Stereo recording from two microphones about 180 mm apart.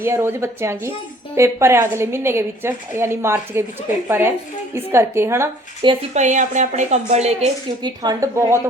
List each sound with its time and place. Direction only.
0.0 s a woman's voice: 15° right (ahead or behind)
5.8 s a woman's voice: 30° right (ahead or behind)
6.1 s a woman's voice: 45° right (ahead or behind)
7.8 s a woman's voice: 25° right (ahead or behind)